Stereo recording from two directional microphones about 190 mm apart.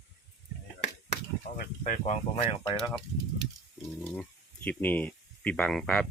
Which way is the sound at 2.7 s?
Centre (ahead or behind).